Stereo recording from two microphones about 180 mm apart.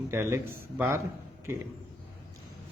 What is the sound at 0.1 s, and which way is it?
Speech, 15° right (ahead or behind).